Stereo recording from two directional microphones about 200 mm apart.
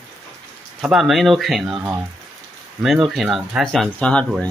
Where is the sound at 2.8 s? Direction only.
5° right (ahead or behind).